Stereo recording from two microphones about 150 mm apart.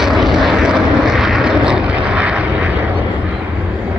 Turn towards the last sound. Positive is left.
turn(degrees=-10)  # may be behind; listen again after turning